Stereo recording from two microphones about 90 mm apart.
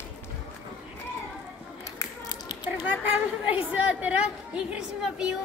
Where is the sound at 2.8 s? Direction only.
15° right (ahead or behind).